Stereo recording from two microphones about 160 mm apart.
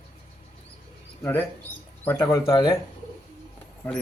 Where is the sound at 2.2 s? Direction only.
25° left (ahead or behind).